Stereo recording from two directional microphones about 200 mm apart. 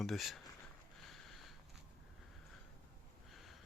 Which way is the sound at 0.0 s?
Centre (ahead or behind).